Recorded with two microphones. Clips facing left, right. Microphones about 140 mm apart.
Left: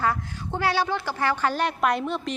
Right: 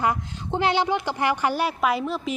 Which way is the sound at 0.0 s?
20° right (ahead or behind).